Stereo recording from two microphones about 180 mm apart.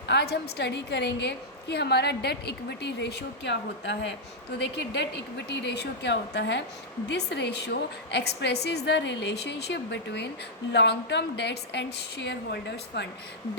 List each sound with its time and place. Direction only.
0.1 s a woman's voice: 65° left (ahead or behind)